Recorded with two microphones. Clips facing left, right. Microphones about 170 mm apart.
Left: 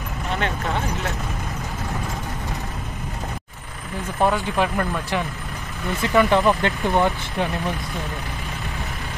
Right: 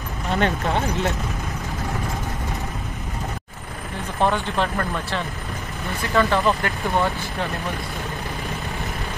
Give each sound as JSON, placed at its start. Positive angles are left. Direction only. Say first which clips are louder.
{"t": 4.2, "sound": "speech", "louder": "left 1 dB", "side_deg": 10}